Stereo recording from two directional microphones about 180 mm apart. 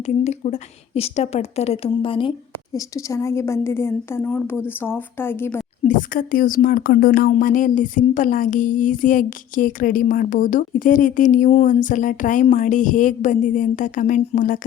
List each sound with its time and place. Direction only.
0.0 s a woman's voice: 40° left (ahead or behind)
2.7 s a woman's voice: 15° left (ahead or behind)
5.9 s a woman's voice: 50° left (ahead or behind)